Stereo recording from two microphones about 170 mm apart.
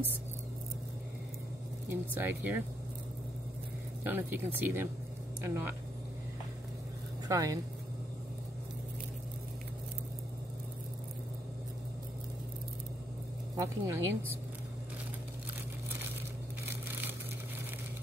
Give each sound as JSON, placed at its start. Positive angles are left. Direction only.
{"t": 1.9, "sound": "speech", "side_deg": -10}
{"t": 4.0, "sound": "speech", "side_deg": -10}
{"t": 7.2, "sound": "speech", "side_deg": -20}
{"t": 13.6, "sound": "speech", "side_deg": -15}